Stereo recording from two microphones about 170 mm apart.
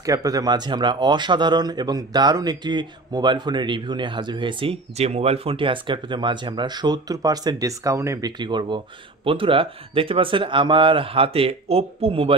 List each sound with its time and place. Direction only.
0.0 s speech: 20° right (ahead or behind)